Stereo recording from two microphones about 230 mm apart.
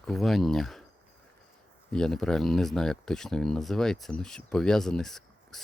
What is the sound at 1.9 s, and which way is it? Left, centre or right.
Speech, centre.